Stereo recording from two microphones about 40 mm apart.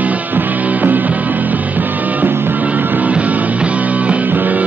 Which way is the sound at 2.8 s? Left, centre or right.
Right.